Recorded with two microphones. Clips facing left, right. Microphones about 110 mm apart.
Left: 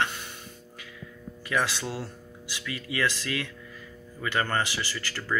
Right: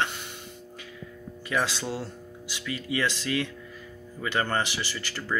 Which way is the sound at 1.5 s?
25° right (ahead or behind).